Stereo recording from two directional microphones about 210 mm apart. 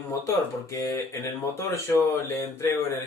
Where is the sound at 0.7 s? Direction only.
15° left (ahead or behind).